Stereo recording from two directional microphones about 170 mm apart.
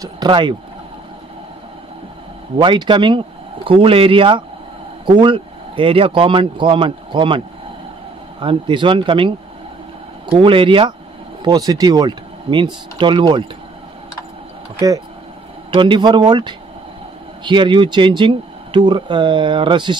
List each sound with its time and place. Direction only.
0.0 s speech: 25° right (ahead or behind)
2.5 s speech: 30° right (ahead or behind)
10.3 s speech: 30° right (ahead or behind)
15.7 s speech: 30° right (ahead or behind)